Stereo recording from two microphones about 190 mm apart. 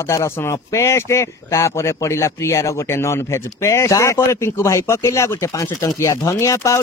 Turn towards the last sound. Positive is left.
turn(degrees=15)  # may be behind; listen again after turning